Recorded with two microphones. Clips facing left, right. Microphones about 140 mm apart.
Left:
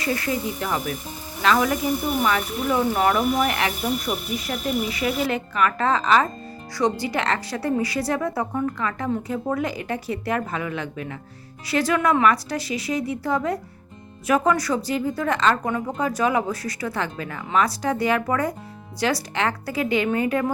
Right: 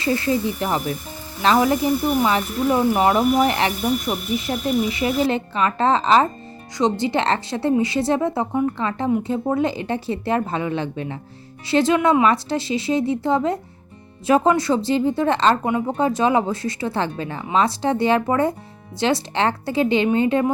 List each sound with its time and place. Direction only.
0.0 s speech: 25° right (ahead or behind)